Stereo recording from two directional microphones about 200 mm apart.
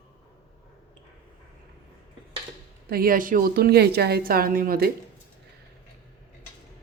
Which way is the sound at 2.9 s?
45° right (ahead or behind).